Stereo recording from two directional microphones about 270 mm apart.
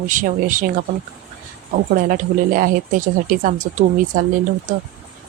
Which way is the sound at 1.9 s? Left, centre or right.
Right.